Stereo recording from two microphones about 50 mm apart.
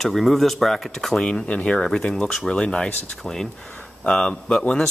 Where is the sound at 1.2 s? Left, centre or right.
Centre.